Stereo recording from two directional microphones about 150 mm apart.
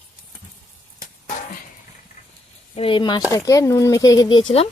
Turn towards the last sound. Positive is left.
turn(degrees=35)  # may be behind; listen again after turning